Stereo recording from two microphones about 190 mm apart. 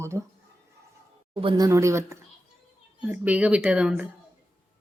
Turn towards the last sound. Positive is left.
turn(degrees=-5)  # may be behind; listen again after turning